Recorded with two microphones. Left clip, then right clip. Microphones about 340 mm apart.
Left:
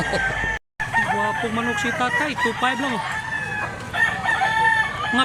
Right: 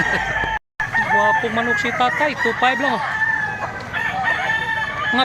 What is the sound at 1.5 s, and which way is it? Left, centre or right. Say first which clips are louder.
Speech: right 4 dB; centre.